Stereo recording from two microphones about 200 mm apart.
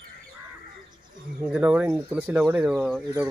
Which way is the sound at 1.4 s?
10° right (ahead or behind).